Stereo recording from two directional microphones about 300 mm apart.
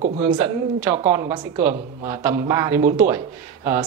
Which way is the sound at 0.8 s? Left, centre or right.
Centre.